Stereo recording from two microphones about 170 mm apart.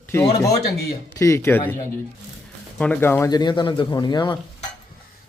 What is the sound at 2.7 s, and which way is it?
Speech, 5° left (ahead or behind).